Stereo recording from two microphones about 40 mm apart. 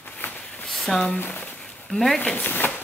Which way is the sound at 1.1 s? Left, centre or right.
Left.